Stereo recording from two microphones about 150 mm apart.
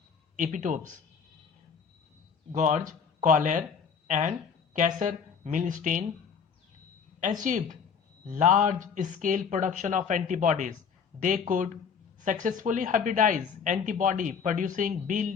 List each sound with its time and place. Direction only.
0.3 s speech: 60° right (ahead or behind)
2.5 s speech: 55° right (ahead or behind)
7.4 s speech: 60° right (ahead or behind)